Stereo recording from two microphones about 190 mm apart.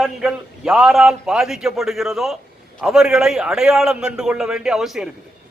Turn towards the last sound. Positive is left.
turn(degrees=0)  # may be behind; listen again after turning